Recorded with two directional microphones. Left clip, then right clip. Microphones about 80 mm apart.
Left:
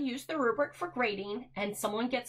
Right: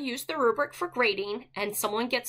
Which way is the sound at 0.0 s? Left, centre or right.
Right.